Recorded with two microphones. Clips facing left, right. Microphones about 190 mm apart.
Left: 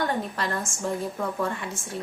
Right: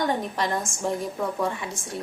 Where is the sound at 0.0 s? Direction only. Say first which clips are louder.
Right 2 dB; 15° right (ahead or behind).